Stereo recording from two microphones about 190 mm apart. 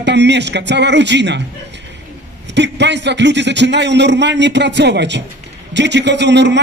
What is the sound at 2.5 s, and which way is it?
A man's voice, 65° right (ahead or behind).